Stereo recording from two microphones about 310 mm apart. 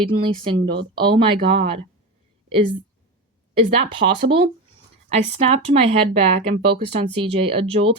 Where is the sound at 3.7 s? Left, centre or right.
Centre.